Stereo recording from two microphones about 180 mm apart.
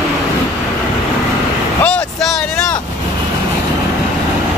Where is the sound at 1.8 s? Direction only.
5° left (ahead or behind).